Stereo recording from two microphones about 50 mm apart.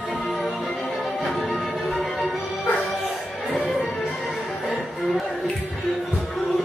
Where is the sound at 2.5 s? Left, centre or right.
Left.